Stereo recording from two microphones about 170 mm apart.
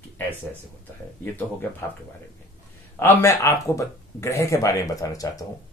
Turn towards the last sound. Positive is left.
turn(degrees=20)  # may be behind; listen again after turning